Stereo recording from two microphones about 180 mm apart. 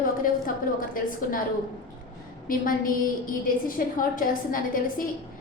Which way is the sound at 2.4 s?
50° left (ahead or behind).